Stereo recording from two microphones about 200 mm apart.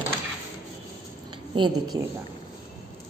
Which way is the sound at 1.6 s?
20° right (ahead or behind).